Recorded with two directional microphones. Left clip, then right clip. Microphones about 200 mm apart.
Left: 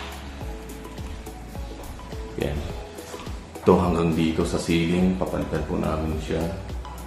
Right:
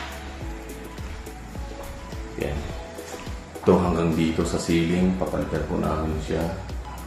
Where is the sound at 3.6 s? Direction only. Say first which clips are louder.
Left 1 dB; 5° left (ahead or behind).